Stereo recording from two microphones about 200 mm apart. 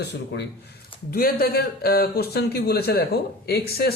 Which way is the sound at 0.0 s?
55° left (ahead or behind).